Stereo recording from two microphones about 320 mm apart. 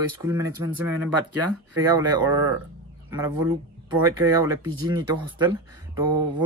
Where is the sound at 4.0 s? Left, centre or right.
Centre.